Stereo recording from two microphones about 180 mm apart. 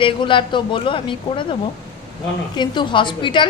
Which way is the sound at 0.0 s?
30° left (ahead or behind).